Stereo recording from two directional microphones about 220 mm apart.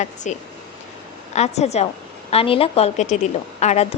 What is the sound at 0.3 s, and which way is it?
A woman's voice, 35° left (ahead or behind).